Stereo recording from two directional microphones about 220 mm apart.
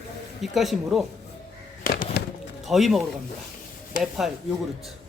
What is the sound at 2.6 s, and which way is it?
Speech, centre (ahead or behind).